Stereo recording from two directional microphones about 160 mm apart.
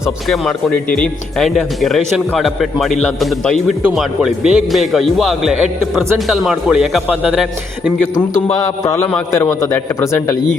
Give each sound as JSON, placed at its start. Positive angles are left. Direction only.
{"t": 0.0, "sound": "speech", "side_deg": 5}
{"t": 8.8, "sound": "a man's voice", "side_deg": 20}